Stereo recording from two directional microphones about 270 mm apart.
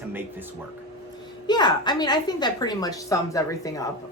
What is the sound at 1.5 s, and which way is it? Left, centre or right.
A woman's voice, centre.